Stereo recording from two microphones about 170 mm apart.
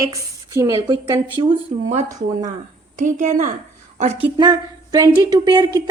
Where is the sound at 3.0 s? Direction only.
50° right (ahead or behind).